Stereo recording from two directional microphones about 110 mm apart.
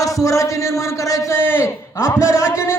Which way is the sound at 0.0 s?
30° left (ahead or behind).